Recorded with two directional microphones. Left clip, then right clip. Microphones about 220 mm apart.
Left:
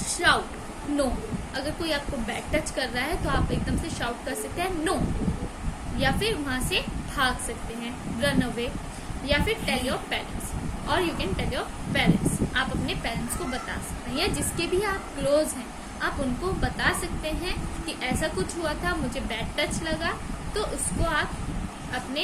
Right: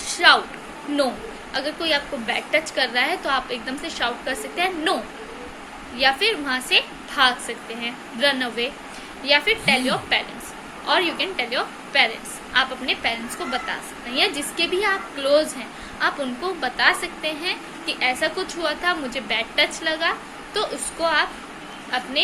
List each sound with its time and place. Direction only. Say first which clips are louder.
0.2 s speech: right 7 dB; 15° left (ahead or behind)
1.5 s a woman's voice: right 7 dB; 20° left (ahead or behind)
6.0 s a woman's voice: right 7 dB; 20° left (ahead or behind)